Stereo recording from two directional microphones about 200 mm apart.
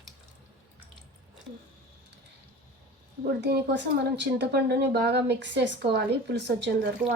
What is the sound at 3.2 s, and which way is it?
A woman's voice, 55° right (ahead or behind).